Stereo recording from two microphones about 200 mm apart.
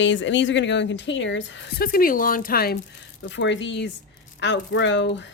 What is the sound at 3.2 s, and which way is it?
Speech, 65° left (ahead or behind).